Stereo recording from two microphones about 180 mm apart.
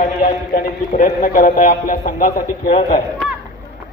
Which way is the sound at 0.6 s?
50° left (ahead or behind).